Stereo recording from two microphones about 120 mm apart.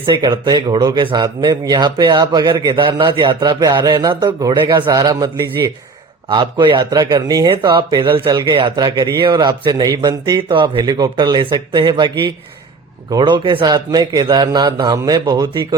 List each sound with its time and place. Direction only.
0.0 s a man's voice: 40° right (ahead or behind)
6.3 s a man's voice: 40° right (ahead or behind)
7.5 s a man's voice: 45° right (ahead or behind)